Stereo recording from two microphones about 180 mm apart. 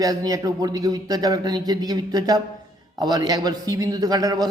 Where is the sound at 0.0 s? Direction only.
20° right (ahead or behind).